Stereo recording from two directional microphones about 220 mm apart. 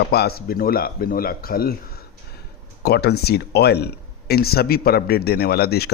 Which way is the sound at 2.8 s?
45° left (ahead or behind).